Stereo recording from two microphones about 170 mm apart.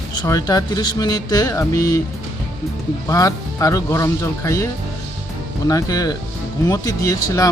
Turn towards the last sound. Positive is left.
turn(degrees=20)  # may be behind; listen again after turning